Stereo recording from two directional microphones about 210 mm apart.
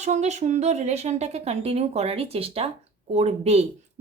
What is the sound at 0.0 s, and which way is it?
Speech, 35° right (ahead or behind).